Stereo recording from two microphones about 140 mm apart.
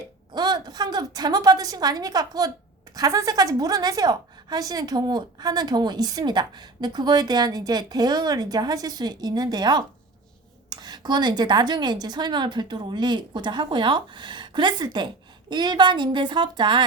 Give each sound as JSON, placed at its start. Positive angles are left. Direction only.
{"t": 0.3, "sound": "a woman's voice", "side_deg": -30}